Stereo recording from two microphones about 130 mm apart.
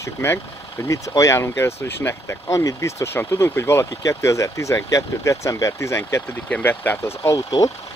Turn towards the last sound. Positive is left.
turn(degrees=25)  # may be behind; listen again after turning